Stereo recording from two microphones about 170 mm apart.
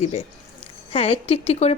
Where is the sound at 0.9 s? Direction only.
30° left (ahead or behind).